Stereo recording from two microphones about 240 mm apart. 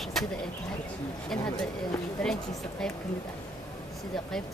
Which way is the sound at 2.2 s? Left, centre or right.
Centre.